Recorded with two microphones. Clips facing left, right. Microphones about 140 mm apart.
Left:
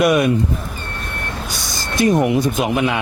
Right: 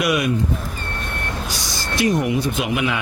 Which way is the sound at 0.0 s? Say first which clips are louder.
Left 6 dB; 45° left (ahead or behind).